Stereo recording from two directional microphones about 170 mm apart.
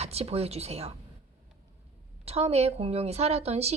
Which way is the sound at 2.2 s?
35° right (ahead or behind).